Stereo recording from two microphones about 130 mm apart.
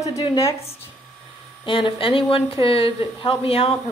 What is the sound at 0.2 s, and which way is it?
Speech, 45° left (ahead or behind).